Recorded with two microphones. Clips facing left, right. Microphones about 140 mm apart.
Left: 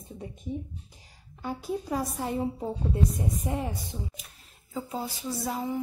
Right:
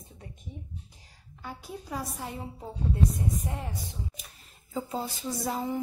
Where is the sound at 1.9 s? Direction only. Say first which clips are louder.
Left 3 dB; 45° left (ahead or behind).